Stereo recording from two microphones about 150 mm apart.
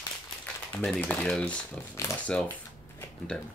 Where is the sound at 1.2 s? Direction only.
5° left (ahead or behind).